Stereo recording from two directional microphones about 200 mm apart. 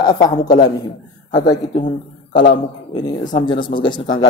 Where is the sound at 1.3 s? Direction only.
20° left (ahead or behind).